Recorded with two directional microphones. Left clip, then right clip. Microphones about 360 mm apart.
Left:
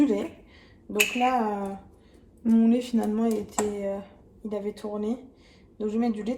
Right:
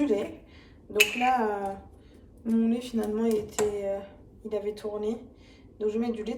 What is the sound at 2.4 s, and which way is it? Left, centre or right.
Speech, centre.